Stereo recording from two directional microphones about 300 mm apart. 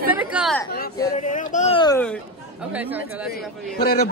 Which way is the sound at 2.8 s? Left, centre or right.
Centre.